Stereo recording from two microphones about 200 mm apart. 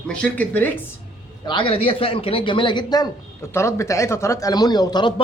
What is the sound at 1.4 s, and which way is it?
A man's voice, 25° left (ahead or behind).